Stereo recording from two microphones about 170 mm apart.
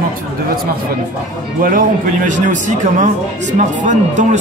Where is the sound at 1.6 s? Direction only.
55° right (ahead or behind).